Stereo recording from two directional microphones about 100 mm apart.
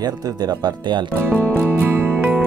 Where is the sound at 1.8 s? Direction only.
20° right (ahead or behind).